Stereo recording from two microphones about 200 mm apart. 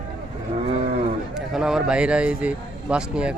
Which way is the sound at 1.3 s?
Centre (ahead or behind).